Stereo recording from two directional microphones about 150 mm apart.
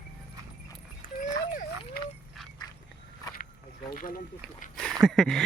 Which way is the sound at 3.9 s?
70° left (ahead or behind).